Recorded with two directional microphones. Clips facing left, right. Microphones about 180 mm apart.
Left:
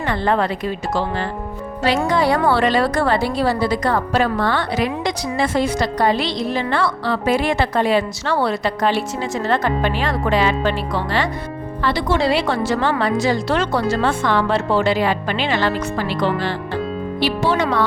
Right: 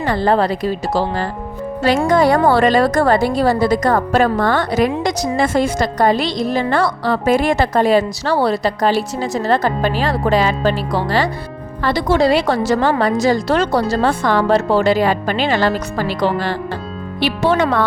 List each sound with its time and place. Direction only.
0.0 s a woman's voice: 35° right (ahead or behind)
17.2 s speech: 55° right (ahead or behind)